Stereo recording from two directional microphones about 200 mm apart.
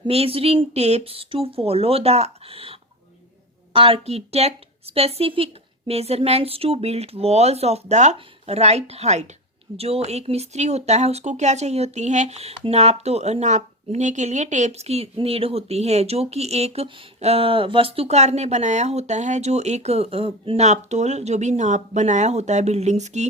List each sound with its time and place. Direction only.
0.1 s speech: 30° right (ahead or behind)